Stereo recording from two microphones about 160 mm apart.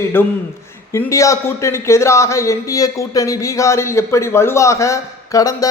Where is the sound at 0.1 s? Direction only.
15° left (ahead or behind).